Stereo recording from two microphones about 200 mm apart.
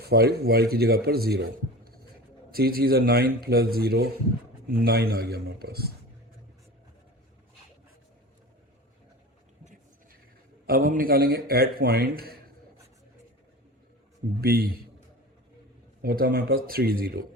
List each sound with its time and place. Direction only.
0.0 s speech: 50° right (ahead or behind)
10.7 s speech: 45° right (ahead or behind)
14.4 s speech: 50° right (ahead or behind)
16.0 s speech: 50° right (ahead or behind)